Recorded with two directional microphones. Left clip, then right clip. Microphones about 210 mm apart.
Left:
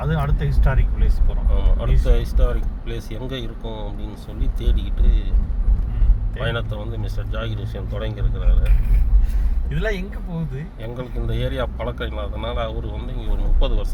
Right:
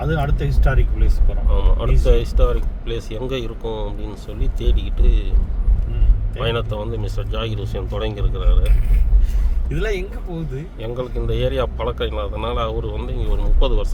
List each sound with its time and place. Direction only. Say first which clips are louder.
0.0 s speech: right 3 dB; 55° right (ahead or behind)
1.5 s speech: right 4 dB; 5° right (ahead or behind)
6.4 s speech: right 4 dB; 10° right (ahead or behind)
10.8 s speech: right 6 dB; 5° right (ahead or behind)